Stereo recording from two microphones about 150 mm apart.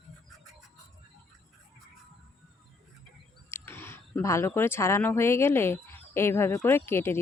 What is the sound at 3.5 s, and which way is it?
Speech, 15° left (ahead or behind).